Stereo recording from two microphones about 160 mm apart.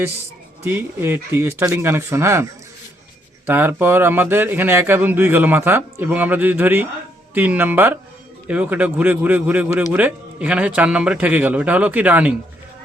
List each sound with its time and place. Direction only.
0.6 s speech: 15° right (ahead or behind)